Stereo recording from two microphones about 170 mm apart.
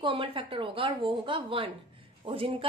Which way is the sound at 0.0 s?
30° right (ahead or behind).